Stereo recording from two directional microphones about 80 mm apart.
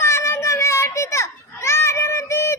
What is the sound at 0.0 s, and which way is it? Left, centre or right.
Children playing, left.